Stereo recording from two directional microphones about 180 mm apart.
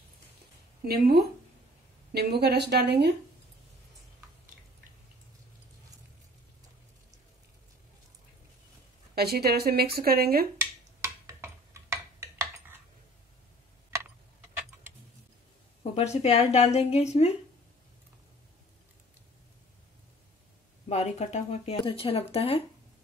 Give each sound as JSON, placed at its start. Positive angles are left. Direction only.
{"t": 0.8, "sound": "a woman's voice", "side_deg": -60}
{"t": 9.1, "sound": "speech", "side_deg": -60}
{"t": 11.0, "sound": "a sound", "side_deg": -15}
{"t": 13.8, "sound": "tick", "side_deg": -10}
{"t": 15.8, "sound": "speech", "side_deg": 35}
{"t": 20.9, "sound": "speech", "side_deg": 35}